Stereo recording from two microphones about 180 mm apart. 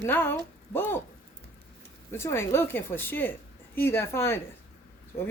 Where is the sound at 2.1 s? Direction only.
15° left (ahead or behind).